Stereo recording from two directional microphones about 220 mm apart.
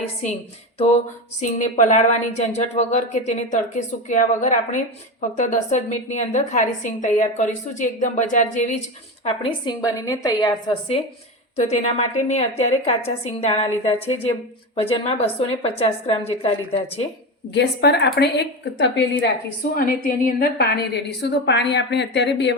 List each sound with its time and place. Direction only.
1.4 s a woman's voice: 35° left (ahead or behind)
9.2 s a woman's voice: 20° left (ahead or behind)
17.5 s a woman's voice: 50° left (ahead or behind)
19.7 s a woman's voice: 40° left (ahead or behind)